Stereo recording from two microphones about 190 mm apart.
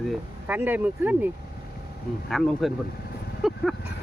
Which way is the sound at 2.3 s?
Centre (ahead or behind).